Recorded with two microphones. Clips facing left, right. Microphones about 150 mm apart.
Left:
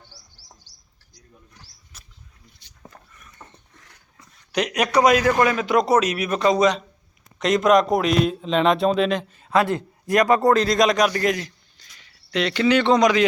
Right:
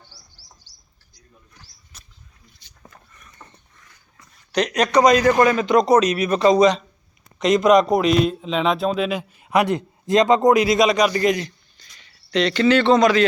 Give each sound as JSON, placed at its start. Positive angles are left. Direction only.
{"t": 0.1, "sound": "bird", "side_deg": 25}
{"t": 1.9, "sound": "rodents", "side_deg": 5}
{"t": 2.6, "sound": "a sound", "side_deg": 60}
{"t": 4.5, "sound": "a man's voice", "side_deg": 10}